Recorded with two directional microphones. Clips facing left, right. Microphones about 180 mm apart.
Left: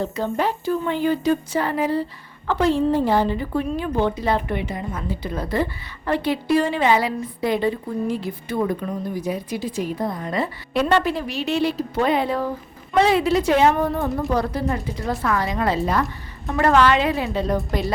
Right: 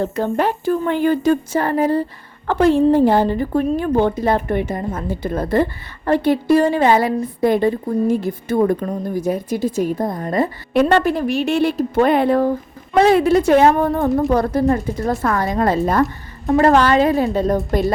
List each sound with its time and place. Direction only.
0.0 s a woman's voice: 55° right (ahead or behind)